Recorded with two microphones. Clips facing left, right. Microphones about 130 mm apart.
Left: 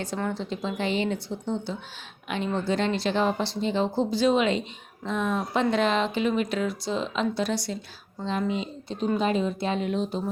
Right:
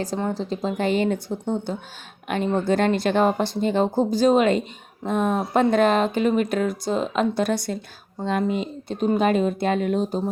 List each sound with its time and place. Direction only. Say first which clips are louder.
0.3 s speech: right 4 dB; 40° right (ahead or behind)